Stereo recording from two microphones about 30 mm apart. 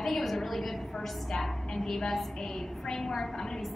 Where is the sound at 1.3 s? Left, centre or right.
Centre.